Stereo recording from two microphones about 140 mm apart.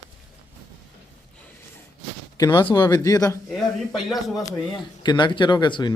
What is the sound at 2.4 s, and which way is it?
Speech, 35° left (ahead or behind).